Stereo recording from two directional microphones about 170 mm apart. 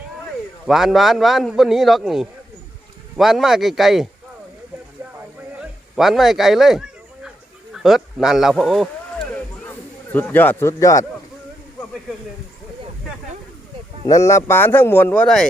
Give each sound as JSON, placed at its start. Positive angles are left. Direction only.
{"t": 0.6, "sound": "a man's voice", "side_deg": 0}
{"t": 6.0, "sound": "speech", "side_deg": 0}
{"t": 7.7, "sound": "a sound", "side_deg": 0}
{"t": 14.1, "sound": "speech", "side_deg": 20}